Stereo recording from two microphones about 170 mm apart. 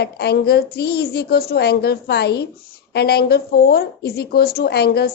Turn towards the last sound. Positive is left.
turn(degrees=70)  # may be behind; listen again after turning